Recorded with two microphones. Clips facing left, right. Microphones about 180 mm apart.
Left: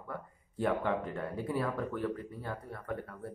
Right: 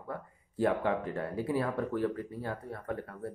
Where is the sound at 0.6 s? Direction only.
30° right (ahead or behind).